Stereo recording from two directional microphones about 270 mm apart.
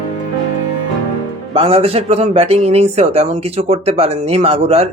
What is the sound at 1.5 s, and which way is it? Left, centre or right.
Speech, right.